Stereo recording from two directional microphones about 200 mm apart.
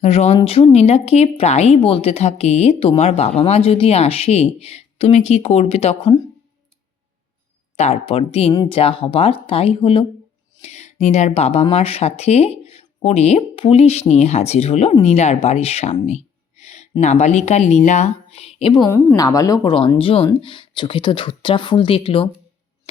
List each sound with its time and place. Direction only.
0.0 s speech: 30° left (ahead or behind)
7.8 s speech: 30° left (ahead or behind)